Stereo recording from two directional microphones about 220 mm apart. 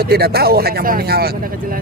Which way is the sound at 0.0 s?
45° right (ahead or behind).